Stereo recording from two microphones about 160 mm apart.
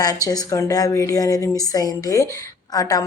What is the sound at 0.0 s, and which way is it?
A woman's voice, 25° left (ahead or behind).